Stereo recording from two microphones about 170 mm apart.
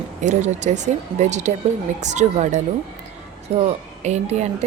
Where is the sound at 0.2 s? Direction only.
45° right (ahead or behind).